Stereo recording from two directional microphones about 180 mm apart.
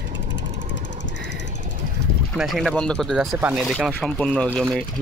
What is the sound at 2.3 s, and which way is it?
Speech, centre (ahead or behind).